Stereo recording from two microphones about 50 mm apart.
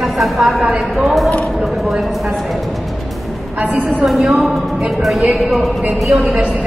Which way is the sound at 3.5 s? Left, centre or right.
Right.